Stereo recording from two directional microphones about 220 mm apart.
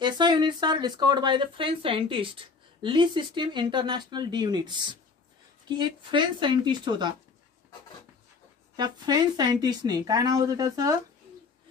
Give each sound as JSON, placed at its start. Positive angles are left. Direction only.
{"t": 0.0, "sound": "speech", "side_deg": -20}
{"t": 8.7, "sound": "speech", "side_deg": -20}